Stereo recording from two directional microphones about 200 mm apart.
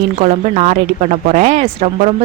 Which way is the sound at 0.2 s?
35° right (ahead or behind).